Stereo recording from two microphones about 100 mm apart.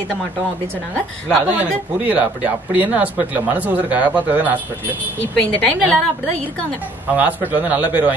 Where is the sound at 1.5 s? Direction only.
15° right (ahead or behind).